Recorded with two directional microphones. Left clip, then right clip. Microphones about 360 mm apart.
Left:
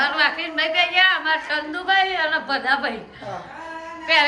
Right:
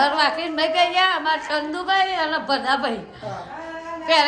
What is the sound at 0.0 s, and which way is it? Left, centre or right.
A woman's voice, centre.